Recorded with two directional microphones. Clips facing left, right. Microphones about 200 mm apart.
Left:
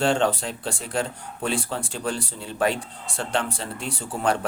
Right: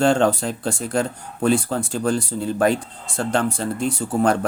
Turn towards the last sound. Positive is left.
turn(degrees=-45)  # may be behind; listen again after turning